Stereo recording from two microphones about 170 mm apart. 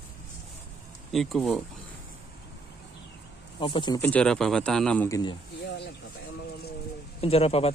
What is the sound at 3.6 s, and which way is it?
Speech, 30° left (ahead or behind).